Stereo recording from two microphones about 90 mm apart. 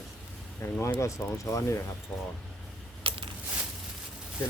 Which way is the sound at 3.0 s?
85° right.